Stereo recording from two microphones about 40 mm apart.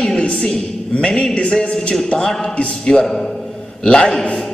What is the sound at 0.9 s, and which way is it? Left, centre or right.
A man's voice, left.